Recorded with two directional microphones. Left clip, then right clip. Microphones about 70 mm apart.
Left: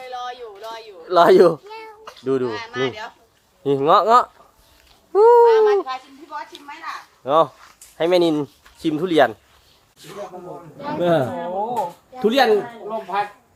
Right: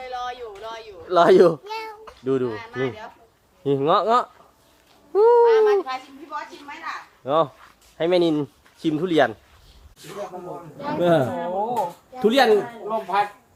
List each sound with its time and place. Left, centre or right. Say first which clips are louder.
0.0 s a sound: even; centre
0.6 s speech: left 1 dB; centre
1.0 s speech: left 2 dB; left
1.6 s cat: right 5 dB; right
2.0 s speech: left 3 dB; left
5.4 s speech: left 3 dB; centre
7.3 s speech: left 4 dB; left
10.0 s speech: even; centre
12.2 s speech: left 1 dB; centre
12.5 s speech: even; centre